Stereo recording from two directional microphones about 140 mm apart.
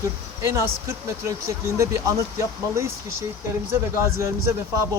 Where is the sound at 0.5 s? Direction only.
20° right (ahead or behind).